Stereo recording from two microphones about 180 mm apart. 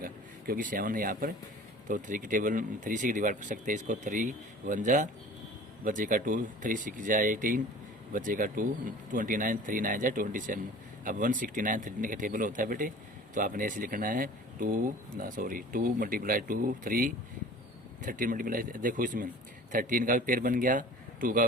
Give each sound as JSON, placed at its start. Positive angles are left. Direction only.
{"t": 0.0, "sound": "a man's voice", "side_deg": -55}